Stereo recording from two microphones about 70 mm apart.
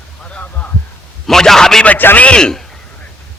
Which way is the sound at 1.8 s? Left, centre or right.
Left.